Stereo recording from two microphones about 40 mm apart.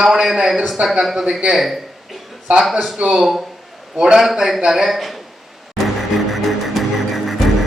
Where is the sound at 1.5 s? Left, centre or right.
Centre.